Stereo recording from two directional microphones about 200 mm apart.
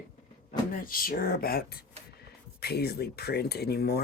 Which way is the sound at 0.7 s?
45° left (ahead or behind).